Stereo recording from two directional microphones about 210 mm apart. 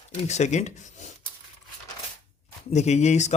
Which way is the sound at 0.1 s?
35° left (ahead or behind).